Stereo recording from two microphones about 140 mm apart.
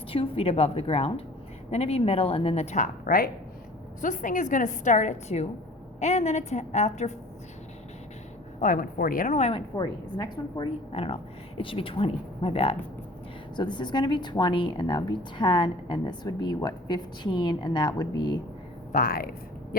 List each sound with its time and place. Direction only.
0.1 s speech: 40° left (ahead or behind); by 3.2 s 85° left
4.0 s a woman's voice: 70° left (ahead or behind)
8.6 s speech: 85° left; by 9.6 s 55° left (ahead or behind)
9.6 s a woman's voice: 25° left (ahead or behind)
10.9 s speech: 40° left (ahead or behind)
13.6 s a woman's voice: 35° left (ahead or behind)
18.9 s speech: 85° left